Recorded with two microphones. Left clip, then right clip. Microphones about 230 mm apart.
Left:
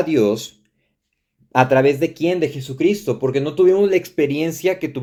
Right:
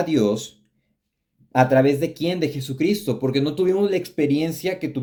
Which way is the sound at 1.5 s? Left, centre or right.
Left.